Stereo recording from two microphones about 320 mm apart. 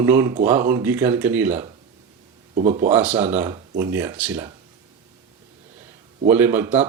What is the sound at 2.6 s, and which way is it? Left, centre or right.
Speech, right.